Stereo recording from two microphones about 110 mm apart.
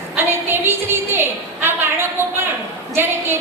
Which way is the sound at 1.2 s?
20° right (ahead or behind).